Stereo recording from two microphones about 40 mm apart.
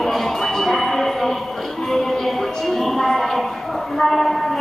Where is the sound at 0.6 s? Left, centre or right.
Centre.